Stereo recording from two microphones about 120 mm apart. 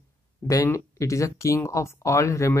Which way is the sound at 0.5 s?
25° left (ahead or behind).